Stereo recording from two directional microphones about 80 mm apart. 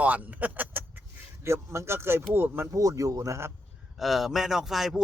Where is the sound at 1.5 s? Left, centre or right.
Right.